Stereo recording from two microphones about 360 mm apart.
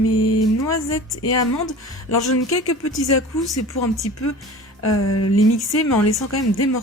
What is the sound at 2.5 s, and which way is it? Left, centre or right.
Music, left.